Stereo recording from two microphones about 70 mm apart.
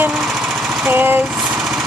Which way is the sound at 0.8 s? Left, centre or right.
Right.